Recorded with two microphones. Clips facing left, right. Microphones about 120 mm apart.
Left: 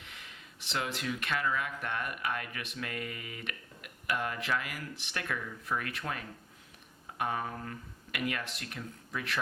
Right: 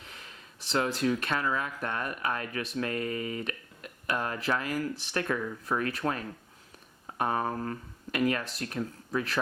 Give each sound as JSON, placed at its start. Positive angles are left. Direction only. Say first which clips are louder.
{"t": 0.0, "sound": "speech", "louder": "right 2 dB", "side_deg": -35}